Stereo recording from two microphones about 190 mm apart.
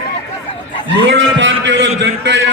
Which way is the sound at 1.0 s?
75° right (ahead or behind).